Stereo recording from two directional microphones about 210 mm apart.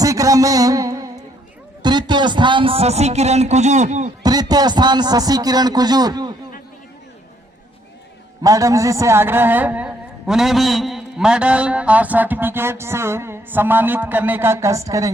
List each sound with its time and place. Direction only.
0.0 s music: 15° right (ahead or behind)
1.8 s speech: 20° right (ahead or behind)
4.2 s a man's voice: 20° right (ahead or behind)
8.4 s a man's voice: 15° right (ahead or behind)